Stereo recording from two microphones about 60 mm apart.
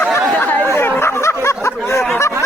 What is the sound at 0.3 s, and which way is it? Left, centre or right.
Chatter, left.